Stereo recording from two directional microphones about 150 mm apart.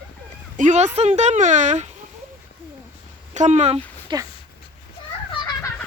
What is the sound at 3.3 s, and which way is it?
Speech, 50° right (ahead or behind).